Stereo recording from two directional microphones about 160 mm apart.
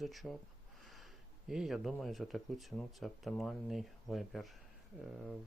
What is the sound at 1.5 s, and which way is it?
Speech, centre (ahead or behind).